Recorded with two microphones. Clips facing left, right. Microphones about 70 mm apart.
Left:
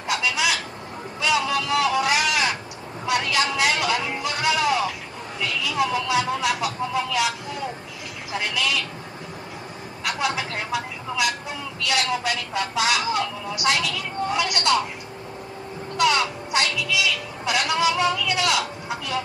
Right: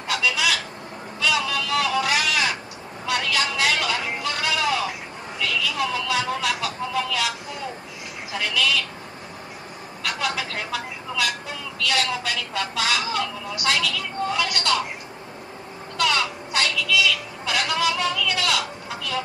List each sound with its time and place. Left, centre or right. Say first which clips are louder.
0.0 s a sound: even; left
4.2 s music: left 2 dB; left
5.4 s speech: left 1 dB; left
8.3 s a woman's voice: right 1 dB; left
10.0 s a woman's voice: left 1 dB; left
16.0 s a woman's voice: left 2 dB; left